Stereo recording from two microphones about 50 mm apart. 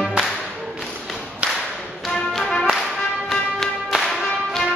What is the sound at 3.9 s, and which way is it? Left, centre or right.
Music, centre.